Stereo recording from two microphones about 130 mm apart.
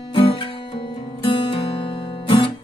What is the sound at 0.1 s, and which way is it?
Music, 40° left (ahead or behind).